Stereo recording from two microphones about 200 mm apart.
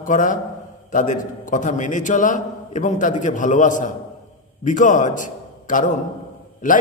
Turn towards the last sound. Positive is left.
turn(degrees=40)  # may be behind; listen again after turning